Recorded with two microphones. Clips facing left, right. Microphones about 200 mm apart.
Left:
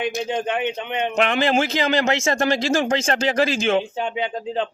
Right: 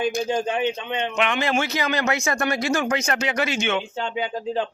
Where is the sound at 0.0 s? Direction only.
20° left (ahead or behind).